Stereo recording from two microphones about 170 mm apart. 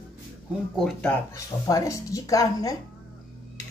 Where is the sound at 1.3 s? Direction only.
20° left (ahead or behind).